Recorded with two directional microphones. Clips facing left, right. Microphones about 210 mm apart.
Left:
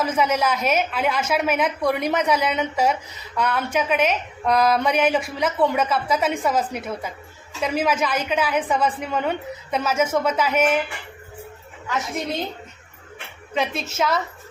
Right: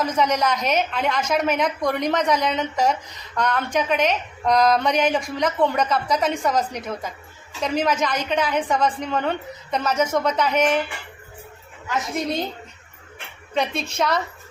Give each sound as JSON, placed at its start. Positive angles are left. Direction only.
{"t": 0.0, "sound": "a woman's voice", "side_deg": 5}
{"t": 13.5, "sound": "a woman's voice", "side_deg": 5}